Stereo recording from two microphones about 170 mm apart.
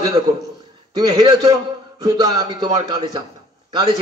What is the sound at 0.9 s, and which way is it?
A man's voice, 25° right (ahead or behind).